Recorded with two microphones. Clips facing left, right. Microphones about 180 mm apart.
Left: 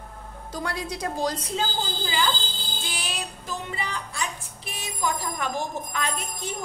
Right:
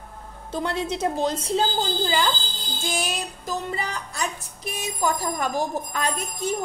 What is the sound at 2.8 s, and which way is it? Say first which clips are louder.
Music: right 7 dB; 45° right (ahead or behind).